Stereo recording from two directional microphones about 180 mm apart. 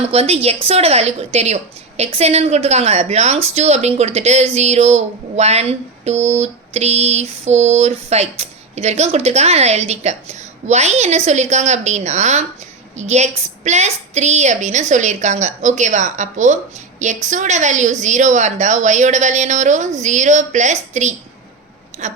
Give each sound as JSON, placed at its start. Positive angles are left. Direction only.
{"t": 0.0, "sound": "speech", "side_deg": -35}